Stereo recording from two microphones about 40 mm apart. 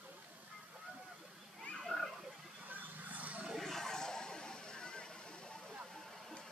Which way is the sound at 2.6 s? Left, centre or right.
Right.